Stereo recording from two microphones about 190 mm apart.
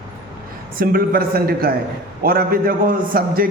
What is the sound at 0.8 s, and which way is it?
A man's voice, 50° right (ahead or behind).